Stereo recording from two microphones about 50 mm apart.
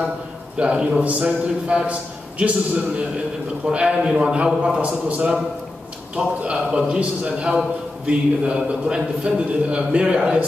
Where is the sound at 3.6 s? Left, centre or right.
Centre.